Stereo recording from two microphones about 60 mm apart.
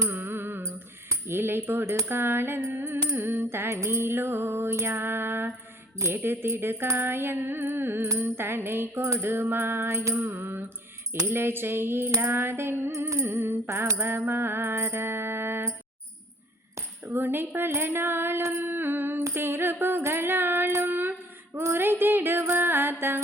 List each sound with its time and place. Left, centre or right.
0.1 s music: right
8.0 s music: right
10.2 s music: right
13.1 s music: right
13.3 s music: right
13.7 s mantra: right
14.2 s music: right
17.1 s music: right
19.3 s a sound: right
21.6 s music: right